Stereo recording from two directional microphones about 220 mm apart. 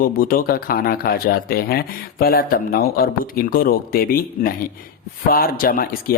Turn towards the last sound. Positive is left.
turn(degrees=40)  # may be behind; listen again after turning